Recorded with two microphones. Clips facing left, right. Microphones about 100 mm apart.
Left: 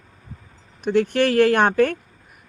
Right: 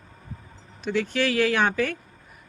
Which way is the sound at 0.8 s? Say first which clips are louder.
Left 6 dB; 55° left (ahead or behind).